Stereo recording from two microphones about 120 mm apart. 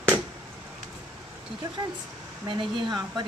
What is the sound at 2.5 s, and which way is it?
Speech, 45° right (ahead or behind).